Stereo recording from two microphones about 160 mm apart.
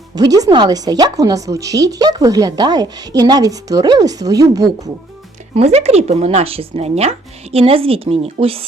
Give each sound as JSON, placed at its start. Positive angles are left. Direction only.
{"t": 0.2, "sound": "speech", "side_deg": -20}
{"t": 5.5, "sound": "speech", "side_deg": -40}